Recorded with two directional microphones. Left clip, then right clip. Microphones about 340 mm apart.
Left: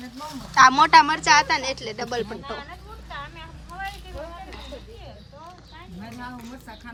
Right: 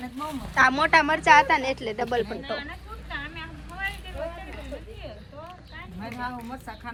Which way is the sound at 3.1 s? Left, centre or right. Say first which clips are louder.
Right 2 dB; centre.